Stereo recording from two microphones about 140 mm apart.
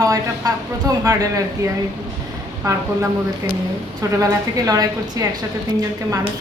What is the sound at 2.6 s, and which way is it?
Speech, 25° right (ahead or behind).